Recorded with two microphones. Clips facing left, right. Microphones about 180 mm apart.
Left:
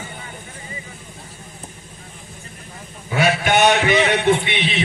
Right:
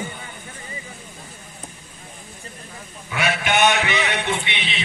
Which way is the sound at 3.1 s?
35° left (ahead or behind).